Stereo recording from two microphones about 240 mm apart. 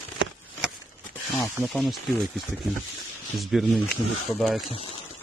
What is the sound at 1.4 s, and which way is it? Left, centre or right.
Speech, centre.